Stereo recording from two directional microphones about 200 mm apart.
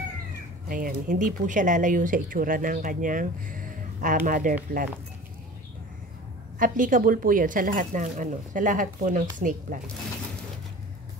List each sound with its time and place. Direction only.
0.7 s speech: 45° right (ahead or behind)
6.6 s speech: 40° right (ahead or behind)